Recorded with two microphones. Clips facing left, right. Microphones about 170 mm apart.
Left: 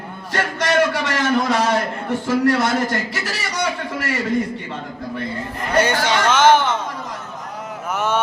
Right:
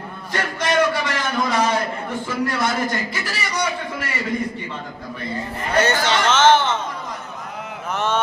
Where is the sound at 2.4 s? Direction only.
65° left (ahead or behind).